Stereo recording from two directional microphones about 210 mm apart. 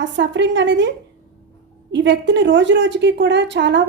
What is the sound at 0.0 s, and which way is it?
A woman's voice, 60° right (ahead or behind).